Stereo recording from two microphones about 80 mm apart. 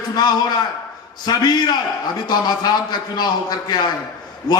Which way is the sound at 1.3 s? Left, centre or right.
Left.